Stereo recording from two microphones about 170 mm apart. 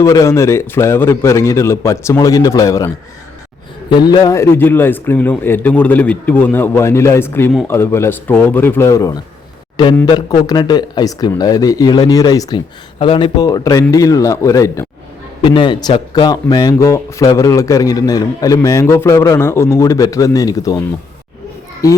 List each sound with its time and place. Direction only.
0.0 s a man's voice: 20° left (ahead or behind)
15.4 s a man's voice: 30° left (ahead or behind)